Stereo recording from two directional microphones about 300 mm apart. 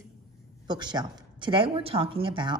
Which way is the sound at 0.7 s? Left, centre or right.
Centre.